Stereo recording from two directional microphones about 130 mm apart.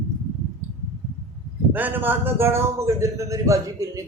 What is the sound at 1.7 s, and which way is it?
A man's voice, 15° right (ahead or behind).